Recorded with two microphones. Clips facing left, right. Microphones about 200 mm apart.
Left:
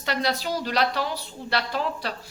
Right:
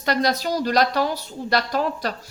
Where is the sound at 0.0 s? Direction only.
40° right (ahead or behind).